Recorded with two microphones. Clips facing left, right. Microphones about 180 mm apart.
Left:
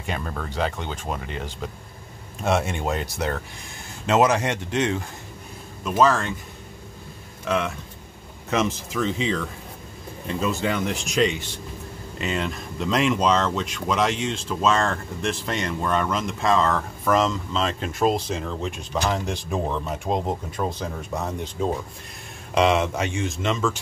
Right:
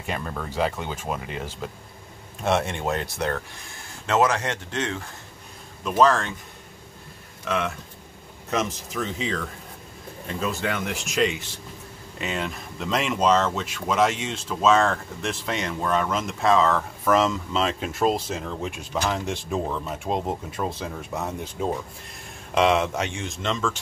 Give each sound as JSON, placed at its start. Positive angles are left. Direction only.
{"t": 0.0, "sound": "speech", "side_deg": 0}
{"t": 4.0, "sound": "speech", "side_deg": 15}
{"t": 5.9, "sound": "speech", "side_deg": 5}
{"t": 7.4, "sound": "speech", "side_deg": 0}